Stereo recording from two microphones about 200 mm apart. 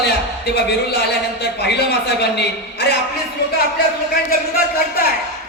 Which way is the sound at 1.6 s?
60° left (ahead or behind).